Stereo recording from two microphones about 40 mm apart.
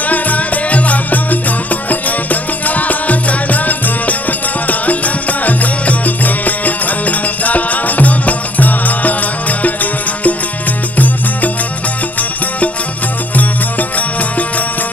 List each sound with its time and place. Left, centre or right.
0.1 s music: left
2.6 s music: left
13.4 s music: left